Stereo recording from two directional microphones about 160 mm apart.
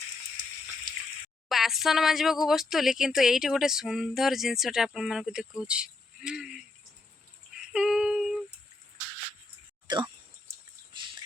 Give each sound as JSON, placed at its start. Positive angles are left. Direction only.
{"t": 1.5, "sound": "speech", "side_deg": 0}
{"t": 7.7, "sound": "female singing", "side_deg": -5}
{"t": 9.8, "sound": "a sound", "side_deg": -25}